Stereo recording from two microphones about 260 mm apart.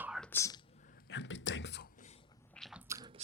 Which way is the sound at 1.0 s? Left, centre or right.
Left.